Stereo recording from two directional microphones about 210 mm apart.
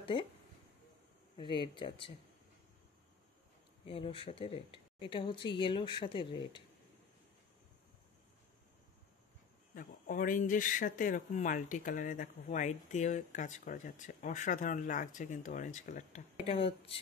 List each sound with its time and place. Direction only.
0.0 s speech: 25° left (ahead or behind)
1.3 s speech: 20° left (ahead or behind)
3.8 s speech: 25° left (ahead or behind)
9.8 s speech: 40° left (ahead or behind)